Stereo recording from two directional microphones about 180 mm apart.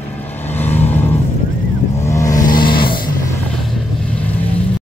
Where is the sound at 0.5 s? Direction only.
10° left (ahead or behind).